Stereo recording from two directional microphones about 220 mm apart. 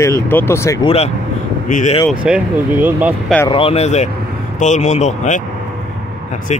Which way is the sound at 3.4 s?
25° left (ahead or behind).